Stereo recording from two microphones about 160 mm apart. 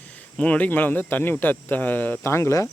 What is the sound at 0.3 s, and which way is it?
Speech, 10° left (ahead or behind).